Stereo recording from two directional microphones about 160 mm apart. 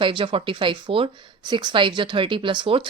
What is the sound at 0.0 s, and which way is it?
Speech, 30° right (ahead or behind).